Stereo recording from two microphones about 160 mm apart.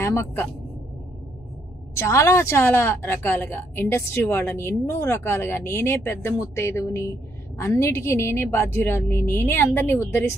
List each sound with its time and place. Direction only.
0.0 s a woman's voice: 15° left (ahead or behind)
2.0 s a woman's voice: 20° left (ahead or behind)